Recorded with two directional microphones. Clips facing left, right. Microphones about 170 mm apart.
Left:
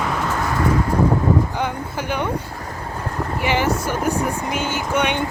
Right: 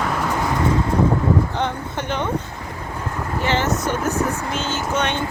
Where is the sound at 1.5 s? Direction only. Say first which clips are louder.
Even; 10° left (ahead or behind).